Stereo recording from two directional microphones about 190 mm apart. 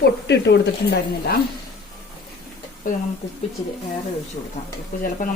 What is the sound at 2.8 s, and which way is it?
Speech, 45° left (ahead or behind).